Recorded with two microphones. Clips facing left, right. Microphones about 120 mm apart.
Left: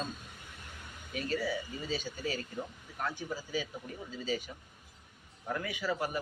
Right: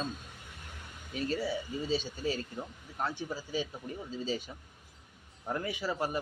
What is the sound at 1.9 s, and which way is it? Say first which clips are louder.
A man's voice: right 3 dB; 30° right (ahead or behind).